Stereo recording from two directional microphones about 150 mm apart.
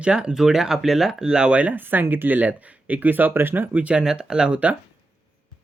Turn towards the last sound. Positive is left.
turn(degrees=-5)  # may be behind; listen again after turning